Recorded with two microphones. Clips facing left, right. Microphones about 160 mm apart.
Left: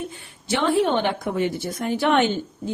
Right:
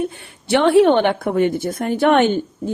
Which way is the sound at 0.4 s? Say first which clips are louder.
Right 8 dB; 70° right (ahead or behind).